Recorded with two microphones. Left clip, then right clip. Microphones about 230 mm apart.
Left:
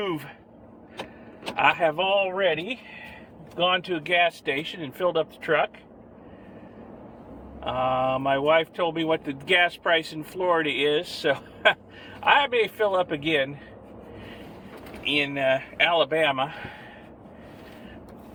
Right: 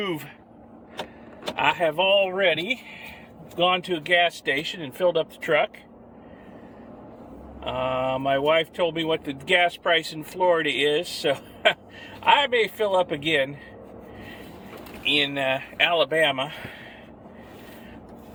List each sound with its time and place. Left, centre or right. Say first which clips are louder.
1.5 s speech: left 1 dB; centre
7.6 s speech: left 1 dB; centre
15.0 s speech: right 1 dB; centre